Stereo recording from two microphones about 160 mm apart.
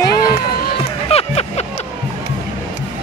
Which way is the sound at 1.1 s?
40° left (ahead or behind).